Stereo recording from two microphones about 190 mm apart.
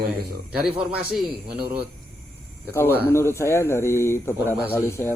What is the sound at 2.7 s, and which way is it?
Speech, 10° left (ahead or behind).